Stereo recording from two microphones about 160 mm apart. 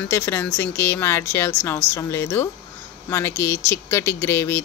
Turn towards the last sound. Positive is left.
turn(degrees=15)  # may be behind; listen again after turning